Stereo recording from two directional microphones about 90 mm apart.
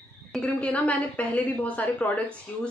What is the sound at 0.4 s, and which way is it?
A woman's voice, 15° left (ahead or behind).